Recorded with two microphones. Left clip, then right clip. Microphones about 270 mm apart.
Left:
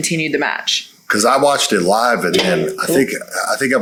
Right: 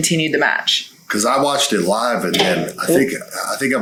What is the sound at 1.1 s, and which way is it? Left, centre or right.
Speech, left.